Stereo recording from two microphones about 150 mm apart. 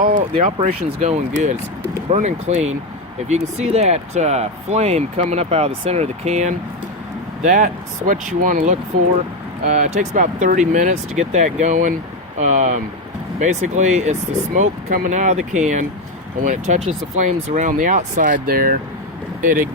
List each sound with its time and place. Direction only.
0.6 s speech: 40° right (ahead or behind)
14.8 s speech: 80° right
15.1 s speech: 50° right (ahead or behind); by 18.8 s 75° right (ahead or behind)
19.4 s speech: 65° right (ahead or behind)